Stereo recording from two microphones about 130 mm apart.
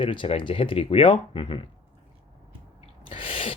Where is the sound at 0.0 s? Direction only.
40° left (ahead or behind).